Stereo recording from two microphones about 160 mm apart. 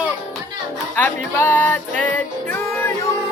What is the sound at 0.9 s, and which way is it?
Music, 10° left (ahead or behind).